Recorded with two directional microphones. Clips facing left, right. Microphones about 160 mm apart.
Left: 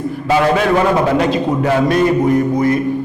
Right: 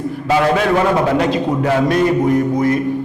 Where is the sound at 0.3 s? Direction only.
15° left (ahead or behind).